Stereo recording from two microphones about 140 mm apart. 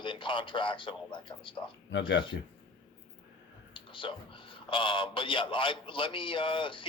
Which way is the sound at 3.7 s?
35° left (ahead or behind).